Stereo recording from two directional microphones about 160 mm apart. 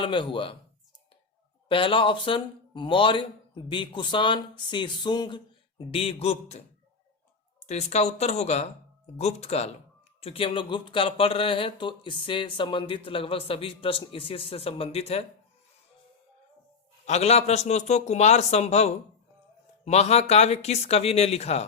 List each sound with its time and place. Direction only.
0.0 s speech: 30° left (ahead or behind)
1.6 s speech: 35° left (ahead or behind)
7.7 s a man's voice: 40° left (ahead or behind)
17.1 s a man's voice: 45° left (ahead or behind)